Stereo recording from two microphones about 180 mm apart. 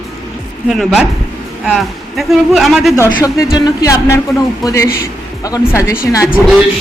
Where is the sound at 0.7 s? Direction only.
Centre (ahead or behind).